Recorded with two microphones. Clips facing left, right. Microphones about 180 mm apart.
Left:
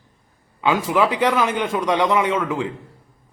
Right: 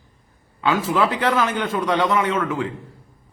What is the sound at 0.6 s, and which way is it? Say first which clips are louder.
A man's voice: left 1 dB; 15° left (ahead or behind).